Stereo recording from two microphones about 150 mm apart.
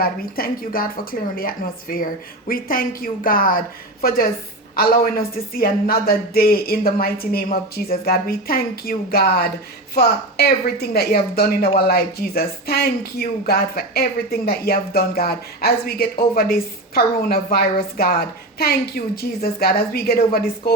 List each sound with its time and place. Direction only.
0.0 s a woman's voice: 80° left